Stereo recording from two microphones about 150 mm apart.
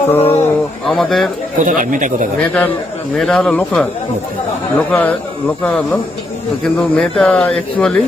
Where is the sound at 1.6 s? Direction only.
65° right (ahead or behind).